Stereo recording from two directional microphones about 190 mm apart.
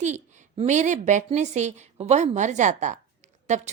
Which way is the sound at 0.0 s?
35° right (ahead or behind).